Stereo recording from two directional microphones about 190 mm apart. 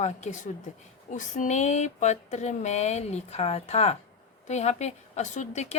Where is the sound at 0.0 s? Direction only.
40° left (ahead or behind).